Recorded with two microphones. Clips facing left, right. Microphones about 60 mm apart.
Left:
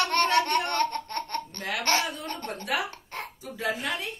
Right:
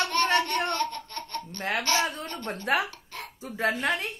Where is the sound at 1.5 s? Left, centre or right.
Right.